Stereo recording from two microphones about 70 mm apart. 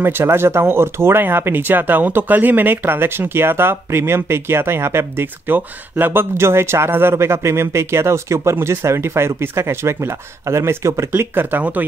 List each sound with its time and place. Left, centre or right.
0.0 s speech: right
11.1 s speech: right